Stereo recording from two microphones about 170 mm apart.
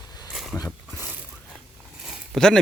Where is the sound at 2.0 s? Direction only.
5° right (ahead or behind).